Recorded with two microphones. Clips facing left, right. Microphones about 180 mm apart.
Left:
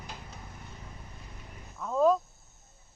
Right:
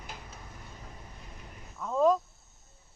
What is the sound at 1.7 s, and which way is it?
Speech, centre (ahead or behind).